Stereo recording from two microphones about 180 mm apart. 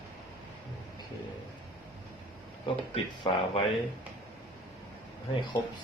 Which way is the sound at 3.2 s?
25° left (ahead or behind).